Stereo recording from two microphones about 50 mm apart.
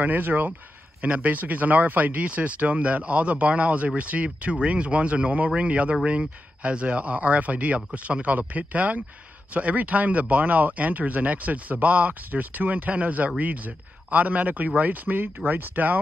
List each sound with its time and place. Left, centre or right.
0.0 s speech: right